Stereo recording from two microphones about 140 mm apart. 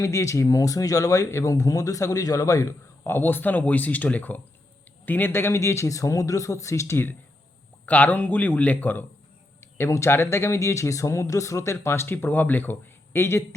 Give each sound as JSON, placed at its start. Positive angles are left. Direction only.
{"t": 0.0, "sound": "a man's voice", "side_deg": 20}